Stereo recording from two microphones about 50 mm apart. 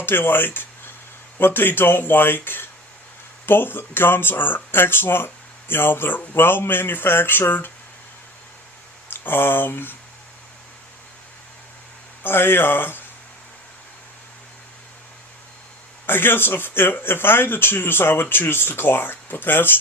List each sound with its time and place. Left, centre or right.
0.0 s speech: left
9.0 s speech: left
12.2 s speech: left
16.0 s speech: left